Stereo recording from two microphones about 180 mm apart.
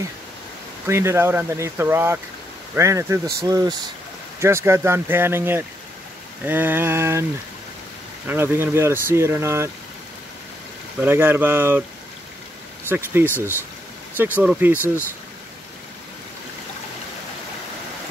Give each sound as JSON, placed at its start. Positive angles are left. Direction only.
{"t": 0.8, "sound": "speech", "side_deg": -15}
{"t": 8.3, "sound": "speech", "side_deg": -15}
{"t": 11.0, "sound": "speech", "side_deg": -10}
{"t": 12.8, "sound": "speech", "side_deg": -10}